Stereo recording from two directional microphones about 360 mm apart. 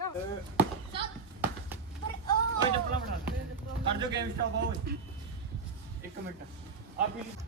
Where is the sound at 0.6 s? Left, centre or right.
Centre.